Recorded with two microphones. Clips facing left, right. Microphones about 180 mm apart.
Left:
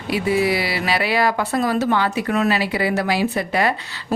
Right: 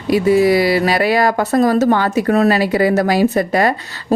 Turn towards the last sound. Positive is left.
turn(degrees=-45)  # may be behind; listen again after turning